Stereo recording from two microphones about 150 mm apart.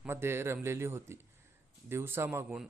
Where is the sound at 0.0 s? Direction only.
15° right (ahead or behind).